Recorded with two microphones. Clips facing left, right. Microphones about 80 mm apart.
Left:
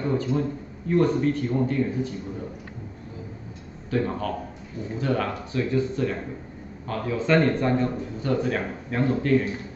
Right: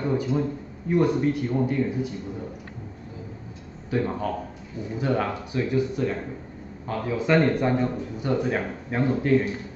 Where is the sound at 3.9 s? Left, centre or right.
Centre.